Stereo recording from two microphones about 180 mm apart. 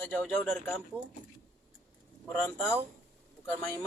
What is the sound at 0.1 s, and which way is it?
Speech, 10° left (ahead or behind).